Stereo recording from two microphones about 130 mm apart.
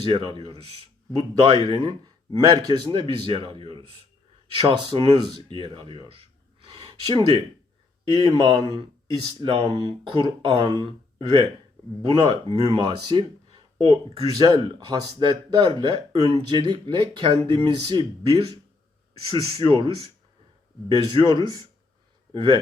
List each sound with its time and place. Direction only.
0.1 s speech: 40° right (ahead or behind)
6.7 s a sound: 40° right (ahead or behind)
8.1 s speech: 40° right (ahead or behind)
14.1 s speech: 30° right (ahead or behind)
20.9 s a man's voice: 35° right (ahead or behind)